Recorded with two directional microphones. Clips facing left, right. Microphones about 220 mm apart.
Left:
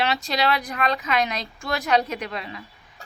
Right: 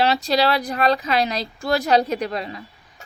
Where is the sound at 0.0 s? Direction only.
35° right (ahead or behind).